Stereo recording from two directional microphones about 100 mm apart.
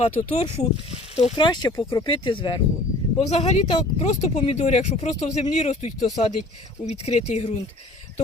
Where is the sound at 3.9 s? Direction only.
85° left.